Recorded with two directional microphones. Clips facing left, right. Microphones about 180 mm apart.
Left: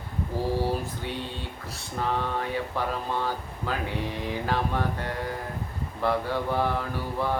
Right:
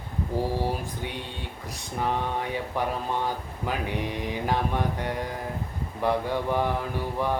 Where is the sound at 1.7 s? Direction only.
15° right (ahead or behind).